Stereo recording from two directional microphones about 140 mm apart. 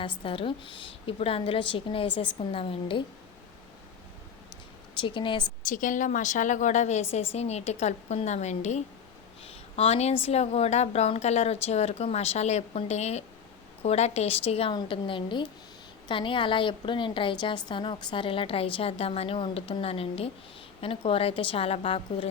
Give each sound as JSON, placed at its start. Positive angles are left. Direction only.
{"t": 0.3, "sound": "a woman's voice", "side_deg": 35}
{"t": 4.9, "sound": "a woman's voice", "side_deg": 35}
{"t": 5.6, "sound": "a woman's voice", "side_deg": 70}